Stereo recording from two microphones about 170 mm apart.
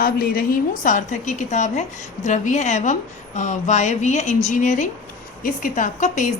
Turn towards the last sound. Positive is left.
turn(degrees=50)  # may be behind; listen again after turning